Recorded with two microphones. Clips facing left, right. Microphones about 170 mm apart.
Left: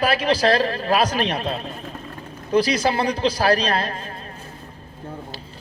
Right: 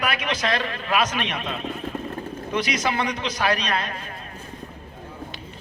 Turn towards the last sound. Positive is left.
turn(degrees=35)  # may be behind; listen again after turning